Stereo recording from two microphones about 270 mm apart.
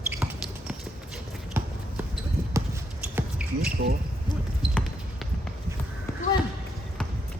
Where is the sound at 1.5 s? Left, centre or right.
Centre.